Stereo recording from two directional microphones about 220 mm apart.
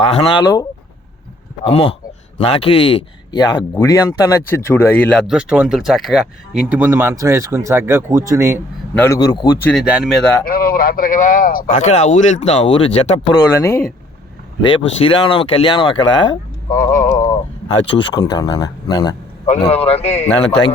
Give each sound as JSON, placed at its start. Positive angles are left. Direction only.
{"t": 0.0, "sound": "speech", "side_deg": 25}
{"t": 1.6, "sound": "speech", "side_deg": 25}
{"t": 9.0, "sound": "speech", "side_deg": 15}
{"t": 9.6, "sound": "speech", "side_deg": 0}
{"t": 10.4, "sound": "a man's voice", "side_deg": 40}
{"t": 13.5, "sound": "speech", "side_deg": 15}
{"t": 14.6, "sound": "speech", "side_deg": 25}
{"t": 16.7, "sound": "a man's voice", "side_deg": 40}
{"t": 18.1, "sound": "speech", "side_deg": 20}